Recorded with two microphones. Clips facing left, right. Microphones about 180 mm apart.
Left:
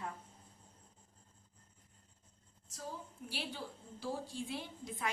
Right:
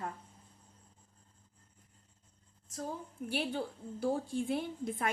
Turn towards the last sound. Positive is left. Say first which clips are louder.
# right 6 dB
turn(degrees=-55)  # may be behind; listen again after turning